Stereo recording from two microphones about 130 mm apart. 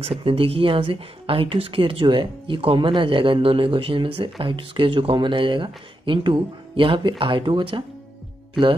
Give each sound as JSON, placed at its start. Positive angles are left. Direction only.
{"t": 0.0, "sound": "speech", "side_deg": -45}